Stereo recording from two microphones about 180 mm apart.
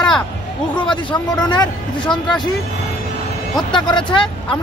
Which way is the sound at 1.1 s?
25° left (ahead or behind).